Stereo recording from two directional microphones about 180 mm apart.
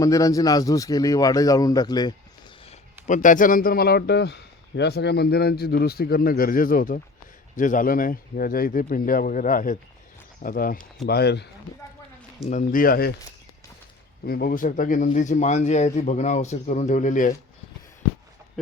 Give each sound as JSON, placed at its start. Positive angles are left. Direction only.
{"t": 0.0, "sound": "speech", "side_deg": 20}
{"t": 2.6, "sound": "a man's voice", "side_deg": 45}
{"t": 11.0, "sound": "speech", "side_deg": 65}
{"t": 12.5, "sound": "speech", "side_deg": 50}
{"t": 14.3, "sound": "speech", "side_deg": 55}